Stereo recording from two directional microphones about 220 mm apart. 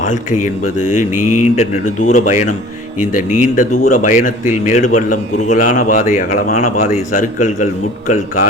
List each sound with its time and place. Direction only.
0.0 s a man's voice: 35° left (ahead or behind)
1.1 s mantra: 90° left
1.5 s a man's voice: 35° left (ahead or behind)